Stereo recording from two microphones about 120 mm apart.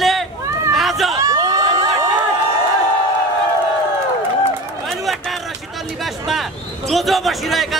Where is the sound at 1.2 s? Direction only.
30° right (ahead or behind).